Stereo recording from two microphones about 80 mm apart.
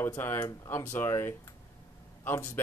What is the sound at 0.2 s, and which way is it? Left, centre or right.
Speech, left.